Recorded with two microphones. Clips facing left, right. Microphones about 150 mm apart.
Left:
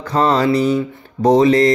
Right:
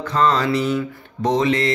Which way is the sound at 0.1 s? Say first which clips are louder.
Left 4 dB; 35° left (ahead or behind).